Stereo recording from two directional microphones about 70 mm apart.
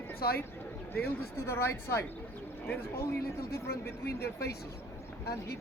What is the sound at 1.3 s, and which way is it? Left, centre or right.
Speech, left.